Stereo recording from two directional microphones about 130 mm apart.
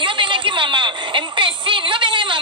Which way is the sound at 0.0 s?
40° right (ahead or behind).